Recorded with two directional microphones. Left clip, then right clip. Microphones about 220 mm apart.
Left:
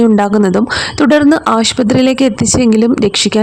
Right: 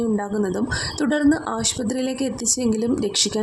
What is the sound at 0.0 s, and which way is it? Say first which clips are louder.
A woman's voice: left 13 dB; 40° left (ahead or behind).